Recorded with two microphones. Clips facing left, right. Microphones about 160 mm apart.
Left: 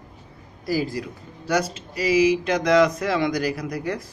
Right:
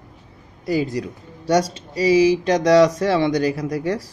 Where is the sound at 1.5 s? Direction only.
30° right (ahead or behind).